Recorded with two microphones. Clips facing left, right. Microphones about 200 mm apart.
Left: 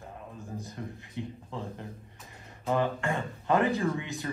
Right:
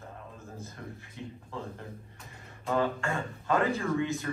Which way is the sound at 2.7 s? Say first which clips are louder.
Even; 15° left (ahead or behind).